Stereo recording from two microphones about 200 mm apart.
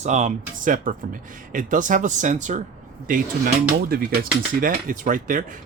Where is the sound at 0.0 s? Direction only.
35° right (ahead or behind).